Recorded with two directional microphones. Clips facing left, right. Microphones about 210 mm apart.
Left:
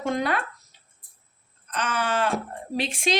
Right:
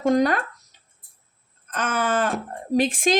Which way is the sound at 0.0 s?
40° right (ahead or behind).